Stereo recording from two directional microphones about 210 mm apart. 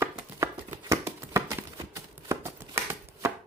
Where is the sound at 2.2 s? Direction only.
10° right (ahead or behind).